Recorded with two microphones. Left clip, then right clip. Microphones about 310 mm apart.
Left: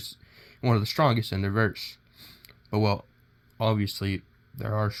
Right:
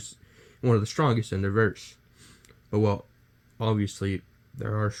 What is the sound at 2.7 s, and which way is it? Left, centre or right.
Speech, left.